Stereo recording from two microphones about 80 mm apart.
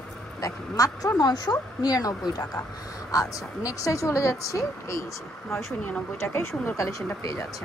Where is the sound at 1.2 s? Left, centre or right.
Left.